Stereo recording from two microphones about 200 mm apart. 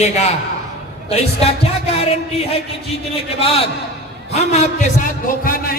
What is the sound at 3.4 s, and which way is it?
A man's voice, 30° left (ahead or behind).